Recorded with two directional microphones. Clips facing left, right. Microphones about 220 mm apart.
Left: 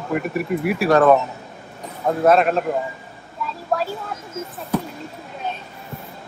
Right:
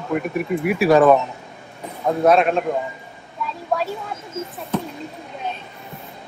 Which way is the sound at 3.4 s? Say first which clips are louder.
Right 1 dB; centre (ahead or behind).